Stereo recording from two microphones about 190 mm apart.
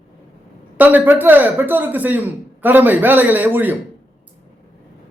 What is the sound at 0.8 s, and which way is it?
A man's voice, 10° right (ahead or behind).